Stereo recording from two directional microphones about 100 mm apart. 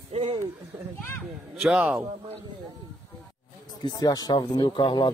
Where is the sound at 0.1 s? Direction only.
85° right.